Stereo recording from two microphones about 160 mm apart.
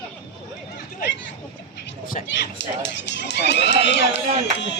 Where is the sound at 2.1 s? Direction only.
75° left (ahead or behind).